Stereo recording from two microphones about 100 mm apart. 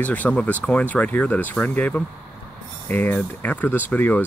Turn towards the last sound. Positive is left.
turn(degrees=15)  # may be behind; listen again after turning